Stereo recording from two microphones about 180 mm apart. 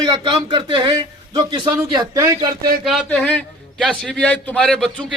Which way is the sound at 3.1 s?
10° left (ahead or behind).